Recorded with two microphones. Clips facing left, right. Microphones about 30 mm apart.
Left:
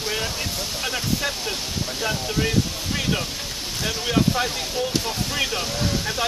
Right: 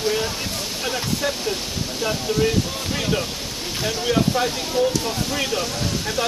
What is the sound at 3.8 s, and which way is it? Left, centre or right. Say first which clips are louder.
Speech: right 1 dB; centre.